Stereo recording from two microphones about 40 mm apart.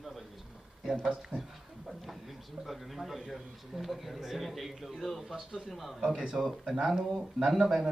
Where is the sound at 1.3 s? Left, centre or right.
Left.